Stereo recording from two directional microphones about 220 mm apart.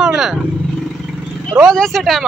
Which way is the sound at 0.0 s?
Centre (ahead or behind).